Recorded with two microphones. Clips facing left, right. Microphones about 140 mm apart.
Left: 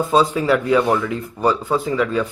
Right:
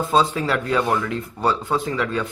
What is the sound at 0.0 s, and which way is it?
Speech, 10° left (ahead or behind).